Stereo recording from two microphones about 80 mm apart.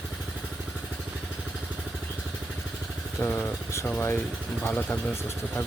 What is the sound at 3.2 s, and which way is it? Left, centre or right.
Vehicle, left.